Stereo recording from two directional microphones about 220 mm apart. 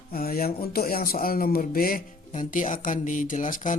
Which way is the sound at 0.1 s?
40° left (ahead or behind).